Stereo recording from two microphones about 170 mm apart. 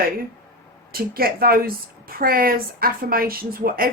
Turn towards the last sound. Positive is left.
turn(degrees=-60)  # may be behind; listen again after turning